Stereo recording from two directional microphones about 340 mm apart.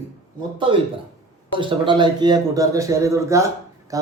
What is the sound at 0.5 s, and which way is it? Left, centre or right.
A man's voice, centre.